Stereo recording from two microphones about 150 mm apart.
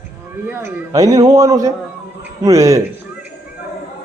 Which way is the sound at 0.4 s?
15° right (ahead or behind).